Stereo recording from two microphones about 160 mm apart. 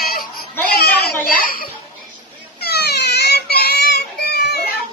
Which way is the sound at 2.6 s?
90° left.